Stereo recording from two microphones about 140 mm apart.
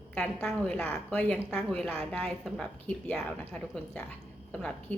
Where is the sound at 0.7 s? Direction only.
10° left (ahead or behind).